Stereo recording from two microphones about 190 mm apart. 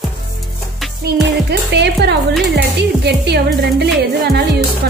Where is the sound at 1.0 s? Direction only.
60° right (ahead or behind).